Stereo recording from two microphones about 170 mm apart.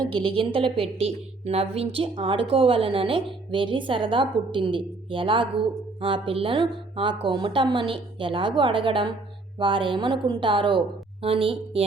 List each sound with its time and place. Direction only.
0.0 s a woman's voice: 30° right (ahead or behind)